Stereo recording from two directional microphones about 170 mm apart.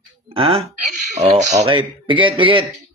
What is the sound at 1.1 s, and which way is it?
Speech, 45° right (ahead or behind).